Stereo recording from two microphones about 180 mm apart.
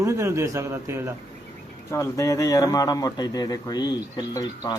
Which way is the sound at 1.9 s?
15° left (ahead or behind).